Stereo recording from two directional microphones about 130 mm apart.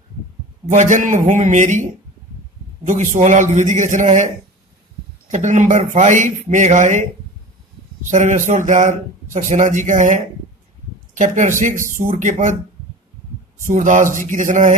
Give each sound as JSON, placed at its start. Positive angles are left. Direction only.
{"t": 0.7, "sound": "speech", "side_deg": -75}
{"t": 5.3, "sound": "speech", "side_deg": -70}
{"t": 8.1, "sound": "speech", "side_deg": -70}
{"t": 13.7, "sound": "speech", "side_deg": -85}